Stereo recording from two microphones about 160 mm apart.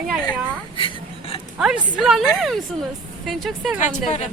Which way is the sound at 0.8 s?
35° left (ahead or behind).